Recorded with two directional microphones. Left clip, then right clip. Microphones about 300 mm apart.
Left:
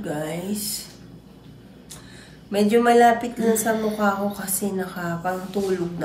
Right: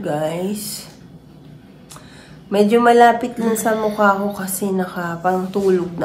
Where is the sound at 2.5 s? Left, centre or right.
Centre.